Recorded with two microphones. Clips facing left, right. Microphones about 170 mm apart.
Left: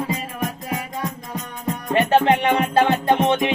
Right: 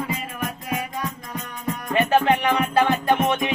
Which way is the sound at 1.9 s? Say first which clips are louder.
Left 2 dB; 30° left (ahead or behind).